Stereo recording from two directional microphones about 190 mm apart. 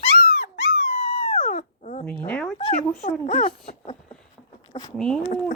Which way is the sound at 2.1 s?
10° left (ahead or behind).